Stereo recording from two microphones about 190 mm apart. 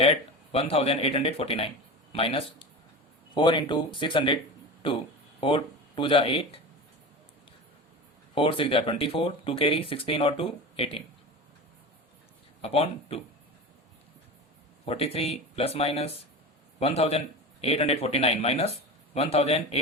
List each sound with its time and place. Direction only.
0.0 s speech: 30° left (ahead or behind)
8.4 s speech: 30° left (ahead or behind)
12.6 s speech: 30° left (ahead or behind)
14.8 s a man's voice: 30° left (ahead or behind)